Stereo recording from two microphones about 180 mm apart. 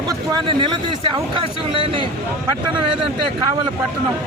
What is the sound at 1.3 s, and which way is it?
Speech, 25° right (ahead or behind).